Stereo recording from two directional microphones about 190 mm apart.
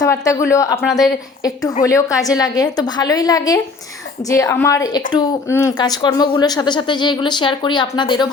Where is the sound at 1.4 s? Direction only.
20° left (ahead or behind).